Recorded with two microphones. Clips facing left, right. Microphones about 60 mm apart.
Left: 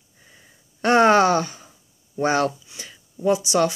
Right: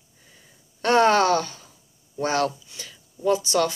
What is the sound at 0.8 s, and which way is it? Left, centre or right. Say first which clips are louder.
Speech: left 3 dB; left.